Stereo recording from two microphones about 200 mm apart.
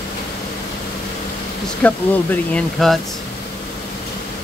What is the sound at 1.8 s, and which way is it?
Speech, 5° left (ahead or behind).